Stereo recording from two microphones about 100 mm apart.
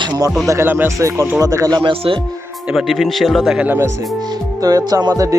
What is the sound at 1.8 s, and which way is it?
Speech, 65° right (ahead or behind).